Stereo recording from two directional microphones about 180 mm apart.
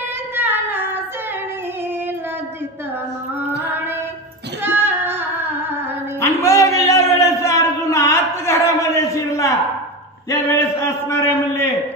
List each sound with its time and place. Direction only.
0.4 s female singing: 10° right (ahead or behind)
4.6 s singing: 10° right (ahead or behind)
6.2 s a sound: 15° left (ahead or behind)
10.3 s a man's voice: 15° left (ahead or behind)